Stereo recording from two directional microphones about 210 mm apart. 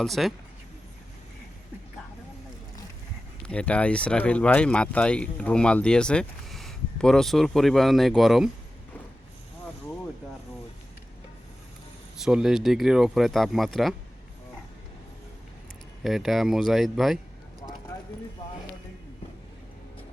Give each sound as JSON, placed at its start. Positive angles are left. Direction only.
{"t": 0.0, "sound": "speech", "side_deg": 0}
{"t": 3.4, "sound": "speech", "side_deg": 5}
{"t": 12.1, "sound": "speech", "side_deg": -5}
{"t": 16.0, "sound": "speech", "side_deg": 0}
{"t": 17.9, "sound": "clip-clop", "side_deg": 15}